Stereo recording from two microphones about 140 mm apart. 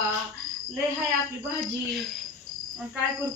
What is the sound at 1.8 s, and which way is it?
Cricket, centre (ahead or behind).